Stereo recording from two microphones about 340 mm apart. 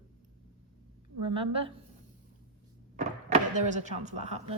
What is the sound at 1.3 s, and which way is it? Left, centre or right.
Speech, centre.